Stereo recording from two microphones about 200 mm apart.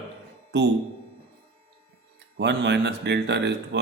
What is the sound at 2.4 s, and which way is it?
Speech, 60° right (ahead or behind).